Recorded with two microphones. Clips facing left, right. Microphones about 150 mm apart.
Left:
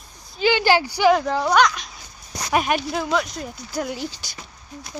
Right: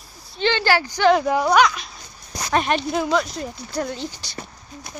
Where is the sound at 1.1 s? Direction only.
10° right (ahead or behind); by 4.1 s 5° left (ahead or behind).